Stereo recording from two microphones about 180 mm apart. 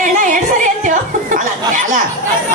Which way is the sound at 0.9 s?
45° right (ahead or behind).